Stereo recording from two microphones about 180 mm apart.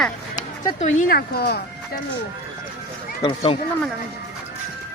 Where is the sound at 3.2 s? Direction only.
30° left (ahead or behind).